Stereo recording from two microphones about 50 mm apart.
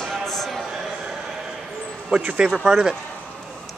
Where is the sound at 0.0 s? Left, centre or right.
Centre.